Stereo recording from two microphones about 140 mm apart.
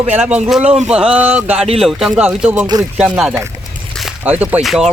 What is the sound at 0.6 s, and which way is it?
Speech, 50° right (ahead or behind).